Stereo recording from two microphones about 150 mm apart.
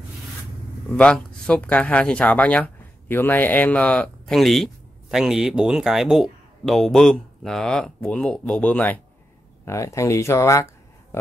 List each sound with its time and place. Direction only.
0.9 s speech: 5° left (ahead or behind)